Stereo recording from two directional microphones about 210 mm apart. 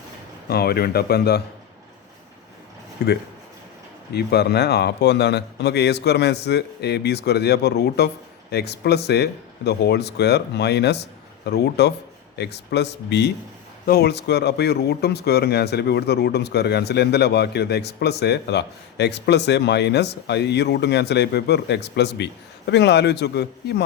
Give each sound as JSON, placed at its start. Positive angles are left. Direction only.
{"t": 0.4, "sound": "speech", "side_deg": 50}
{"t": 3.0, "sound": "speech", "side_deg": 50}